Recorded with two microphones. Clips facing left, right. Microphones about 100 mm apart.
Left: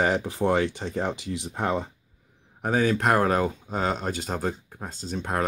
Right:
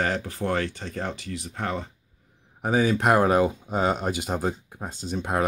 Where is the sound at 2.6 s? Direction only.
5° right (ahead or behind).